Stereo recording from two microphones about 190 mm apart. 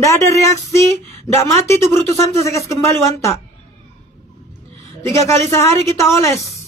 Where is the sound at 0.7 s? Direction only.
15° left (ahead or behind).